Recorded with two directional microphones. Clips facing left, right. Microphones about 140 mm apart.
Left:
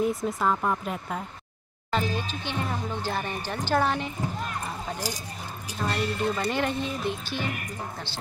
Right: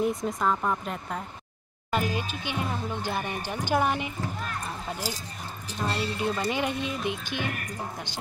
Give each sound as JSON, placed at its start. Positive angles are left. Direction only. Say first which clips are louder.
{"t": 0.0, "sound": "speech", "louder": "left 1 dB", "side_deg": 0}
{"t": 1.9, "sound": "speech", "louder": "even", "side_deg": -10}
{"t": 5.9, "sound": "speech", "louder": "left 2 dB", "side_deg": -5}